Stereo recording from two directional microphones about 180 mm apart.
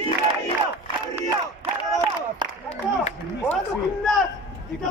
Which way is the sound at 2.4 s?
25° right (ahead or behind).